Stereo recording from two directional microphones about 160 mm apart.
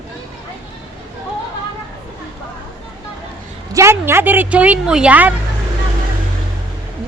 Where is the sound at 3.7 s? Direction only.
15° right (ahead or behind).